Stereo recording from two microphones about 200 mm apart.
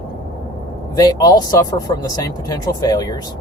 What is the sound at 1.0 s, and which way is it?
Speech, 20° left (ahead or behind).